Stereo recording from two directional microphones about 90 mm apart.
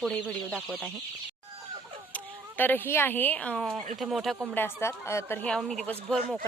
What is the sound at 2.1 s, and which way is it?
Speech, 20° left (ahead or behind).